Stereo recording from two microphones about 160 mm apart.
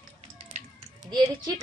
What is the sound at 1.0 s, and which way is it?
Speech, 25° right (ahead or behind).